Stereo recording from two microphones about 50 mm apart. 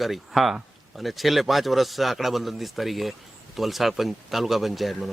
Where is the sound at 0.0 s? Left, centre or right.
Centre.